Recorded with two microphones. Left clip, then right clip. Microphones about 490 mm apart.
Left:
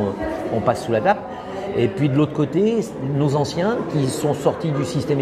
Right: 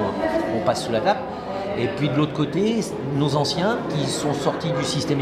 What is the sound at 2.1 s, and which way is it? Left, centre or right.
A man's voice, left.